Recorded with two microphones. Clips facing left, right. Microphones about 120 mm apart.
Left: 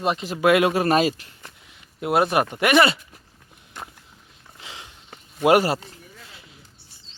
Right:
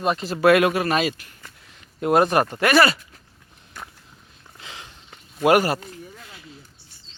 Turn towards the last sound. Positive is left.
turn(degrees=25)  # may be behind; listen again after turning